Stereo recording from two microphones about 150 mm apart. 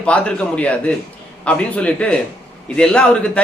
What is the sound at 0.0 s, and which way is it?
A man's voice, 10° left (ahead or behind).